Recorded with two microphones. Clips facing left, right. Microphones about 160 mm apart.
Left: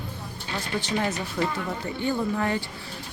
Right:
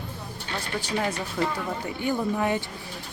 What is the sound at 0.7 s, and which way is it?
Speech, 10° right (ahead or behind).